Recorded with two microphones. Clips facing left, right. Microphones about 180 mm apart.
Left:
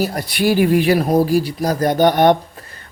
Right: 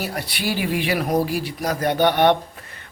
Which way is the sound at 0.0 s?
40° left (ahead or behind).